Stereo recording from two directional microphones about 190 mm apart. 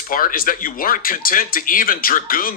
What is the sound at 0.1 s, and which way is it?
Speech, 45° left (ahead or behind).